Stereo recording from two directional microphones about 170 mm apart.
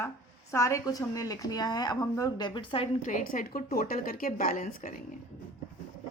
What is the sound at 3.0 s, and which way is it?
A woman's voice, 50° left (ahead or behind).